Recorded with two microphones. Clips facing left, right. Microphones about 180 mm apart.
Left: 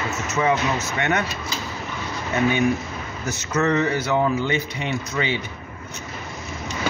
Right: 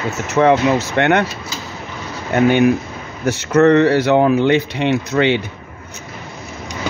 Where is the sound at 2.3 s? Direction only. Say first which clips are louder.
Right 7 dB; 70° right (ahead or behind).